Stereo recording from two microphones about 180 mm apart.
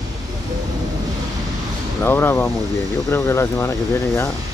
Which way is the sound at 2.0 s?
10° left (ahead or behind).